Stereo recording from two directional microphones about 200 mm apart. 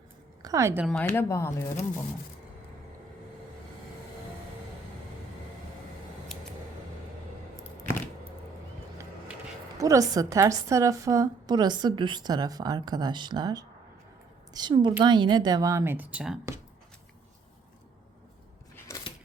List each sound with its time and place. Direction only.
0.4 s speech: 15° right (ahead or behind)
0.9 s speech: 10° left (ahead or behind)
9.7 s a woman's voice: 15° right (ahead or behind)
18.8 s a sound: 15° left (ahead or behind)